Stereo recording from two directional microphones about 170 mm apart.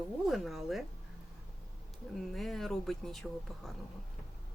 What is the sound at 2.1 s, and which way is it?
Speech, centre (ahead or behind).